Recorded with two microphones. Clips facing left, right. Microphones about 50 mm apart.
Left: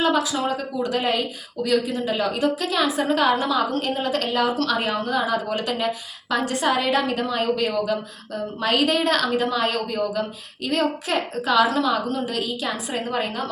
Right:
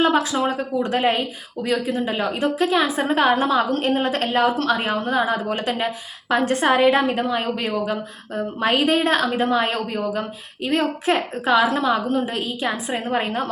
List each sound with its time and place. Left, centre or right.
0.0 s a woman's voice: right